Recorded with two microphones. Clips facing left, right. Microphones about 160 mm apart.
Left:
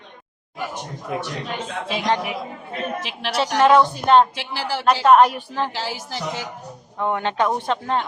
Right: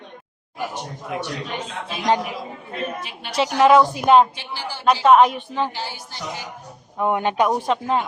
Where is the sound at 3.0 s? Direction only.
90° left.